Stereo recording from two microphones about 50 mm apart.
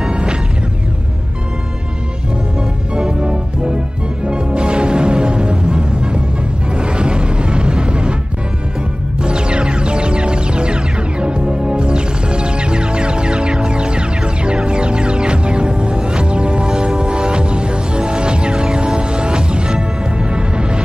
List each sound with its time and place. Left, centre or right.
0.0 s music: centre
2.9 s music: centre
9.2 s music: centre